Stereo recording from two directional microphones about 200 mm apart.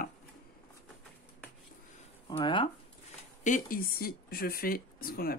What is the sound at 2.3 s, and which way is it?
Speech, 25° left (ahead or behind).